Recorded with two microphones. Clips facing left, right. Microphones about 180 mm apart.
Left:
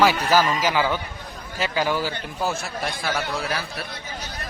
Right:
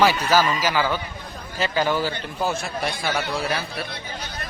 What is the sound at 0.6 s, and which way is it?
A man's voice, 15° left (ahead or behind).